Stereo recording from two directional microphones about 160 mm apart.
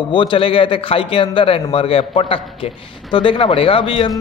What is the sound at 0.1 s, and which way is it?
A man's voice, 30° left (ahead or behind).